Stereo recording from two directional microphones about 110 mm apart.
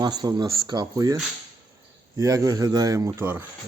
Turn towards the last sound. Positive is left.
turn(degrees=-20)  # may be behind; listen again after turning